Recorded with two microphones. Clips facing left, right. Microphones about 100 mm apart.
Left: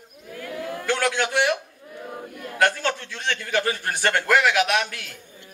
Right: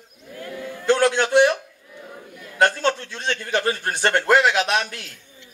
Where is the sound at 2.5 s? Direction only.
20° right (ahead or behind).